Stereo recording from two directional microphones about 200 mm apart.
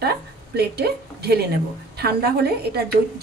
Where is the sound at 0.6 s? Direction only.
55° right (ahead or behind).